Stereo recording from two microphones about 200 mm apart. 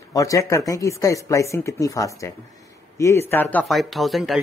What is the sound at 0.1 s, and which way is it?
Speech, 15° left (ahead or behind).